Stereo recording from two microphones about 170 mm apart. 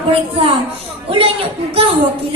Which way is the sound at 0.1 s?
35° right (ahead or behind).